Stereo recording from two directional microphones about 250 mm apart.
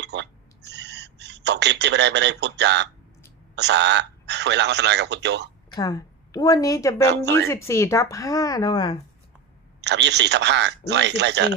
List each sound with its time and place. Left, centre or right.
0.0 s a sound: right
3.5 s speech: right
5.6 s a woman's voice: centre
9.8 s speech: right